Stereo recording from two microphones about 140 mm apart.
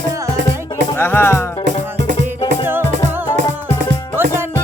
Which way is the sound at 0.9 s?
15° left (ahead or behind).